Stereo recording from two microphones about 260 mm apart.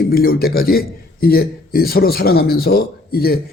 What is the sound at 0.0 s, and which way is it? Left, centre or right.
A man's voice, left.